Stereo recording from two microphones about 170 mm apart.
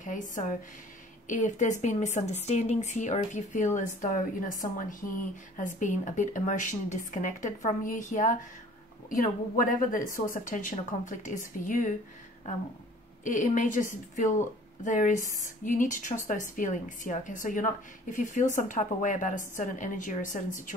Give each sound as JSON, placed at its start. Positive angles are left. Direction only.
{"t": 0.0, "sound": "a woman's voice", "side_deg": 50}
{"t": 13.2, "sound": "a woman's voice", "side_deg": 50}